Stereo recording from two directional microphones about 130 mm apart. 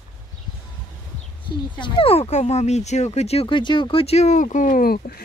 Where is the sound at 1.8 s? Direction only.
45° left (ahead or behind); by 5.1 s 85° left.